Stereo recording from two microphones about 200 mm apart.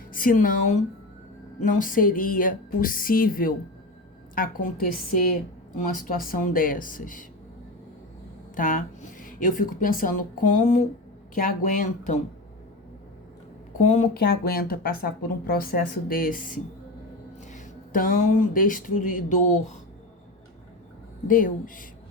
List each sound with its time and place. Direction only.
0.1 s speech: 45° left (ahead or behind)
8.5 s speech: 40° left (ahead or behind)
13.7 s speech: 35° left (ahead or behind)
21.2 s speech: 45° left (ahead or behind)